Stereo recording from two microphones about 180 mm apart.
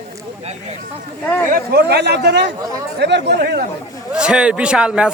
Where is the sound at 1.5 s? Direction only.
60° right (ahead or behind).